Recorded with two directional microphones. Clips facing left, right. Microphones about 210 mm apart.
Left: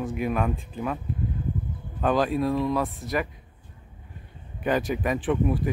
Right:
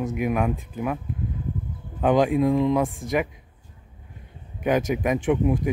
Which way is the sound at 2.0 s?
15° right (ahead or behind).